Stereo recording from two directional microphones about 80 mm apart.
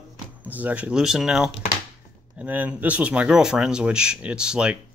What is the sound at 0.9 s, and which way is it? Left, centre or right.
Speech, centre.